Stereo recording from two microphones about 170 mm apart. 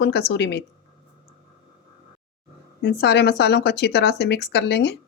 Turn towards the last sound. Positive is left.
turn(degrees=90)